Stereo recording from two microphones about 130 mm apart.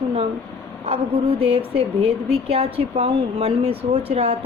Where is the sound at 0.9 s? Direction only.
50° right (ahead or behind).